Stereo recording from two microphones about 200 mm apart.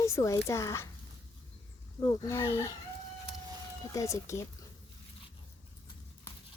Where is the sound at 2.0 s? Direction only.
15° left (ahead or behind).